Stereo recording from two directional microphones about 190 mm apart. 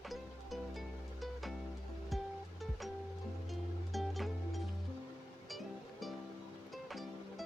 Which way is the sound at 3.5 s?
Centre (ahead or behind).